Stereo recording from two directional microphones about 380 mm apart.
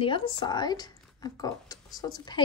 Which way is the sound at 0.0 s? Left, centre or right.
Centre.